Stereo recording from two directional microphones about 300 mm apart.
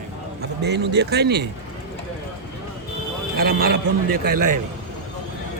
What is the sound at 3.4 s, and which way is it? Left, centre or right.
Speech, right.